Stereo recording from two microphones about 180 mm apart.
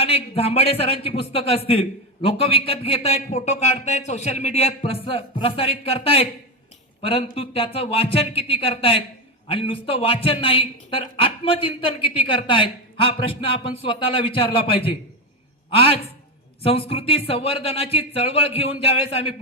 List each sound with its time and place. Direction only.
0.0 s a man's voice: 35° left (ahead or behind)